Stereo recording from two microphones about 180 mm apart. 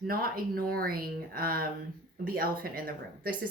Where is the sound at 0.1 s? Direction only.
55° right (ahead or behind).